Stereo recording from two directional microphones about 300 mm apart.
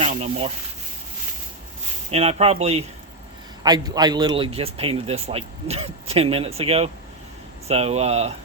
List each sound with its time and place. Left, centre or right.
0.0 s speech: right
2.0 s a man's voice: centre